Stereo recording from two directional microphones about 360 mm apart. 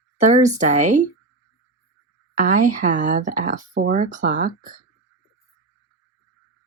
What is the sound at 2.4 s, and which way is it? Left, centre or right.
Speech, right.